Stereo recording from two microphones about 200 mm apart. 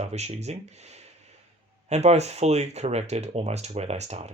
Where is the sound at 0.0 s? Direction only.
35° right (ahead or behind).